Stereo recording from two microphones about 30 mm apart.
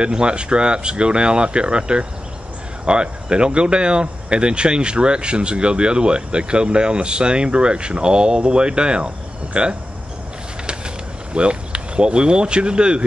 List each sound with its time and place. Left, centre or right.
0.0 s speech: right
11.3 s speech: right